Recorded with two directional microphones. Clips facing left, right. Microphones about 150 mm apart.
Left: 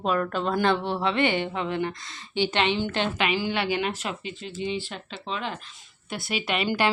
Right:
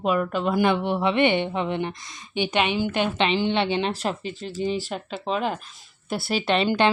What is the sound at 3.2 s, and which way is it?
Speech, 25° right (ahead or behind).